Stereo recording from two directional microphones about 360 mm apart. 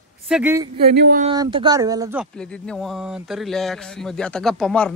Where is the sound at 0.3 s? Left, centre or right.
Centre.